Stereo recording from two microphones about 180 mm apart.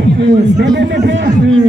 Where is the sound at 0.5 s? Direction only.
75° right (ahead or behind).